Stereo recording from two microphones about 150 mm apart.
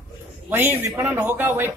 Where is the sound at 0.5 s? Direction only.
15° right (ahead or behind).